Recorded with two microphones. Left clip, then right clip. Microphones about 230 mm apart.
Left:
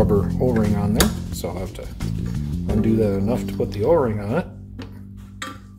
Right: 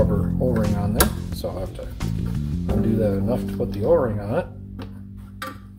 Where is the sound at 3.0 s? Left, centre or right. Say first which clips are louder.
Left 1 dB; left.